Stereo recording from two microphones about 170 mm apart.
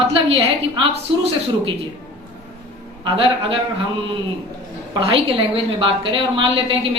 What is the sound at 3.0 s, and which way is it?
Speech, 30° right (ahead or behind).